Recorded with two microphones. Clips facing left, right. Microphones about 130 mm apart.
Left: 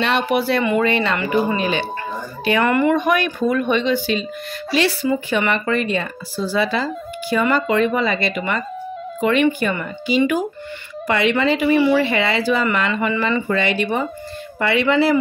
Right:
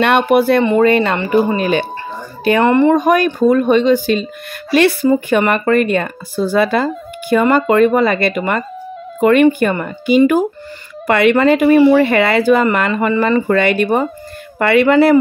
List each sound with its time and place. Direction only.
0.0 s speech: 50° right (ahead or behind)
1.1 s speech: 30° right (ahead or behind)
1.6 s speech: 45° right (ahead or behind)
2.6 s speech: 30° right (ahead or behind); by 4.9 s 55° right (ahead or behind)
5.0 s speech: 40° right (ahead or behind)